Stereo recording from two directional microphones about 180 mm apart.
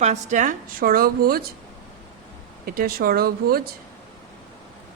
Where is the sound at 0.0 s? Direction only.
40° right (ahead or behind).